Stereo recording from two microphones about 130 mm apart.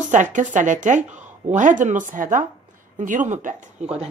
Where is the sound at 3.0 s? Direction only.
75° right (ahead or behind); by 4.1 s 55° right (ahead or behind).